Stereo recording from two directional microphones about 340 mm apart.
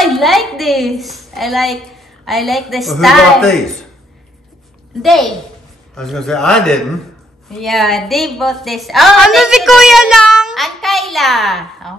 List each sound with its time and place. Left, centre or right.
0.0 s a woman's voice: centre
5.0 s a woman's voice: centre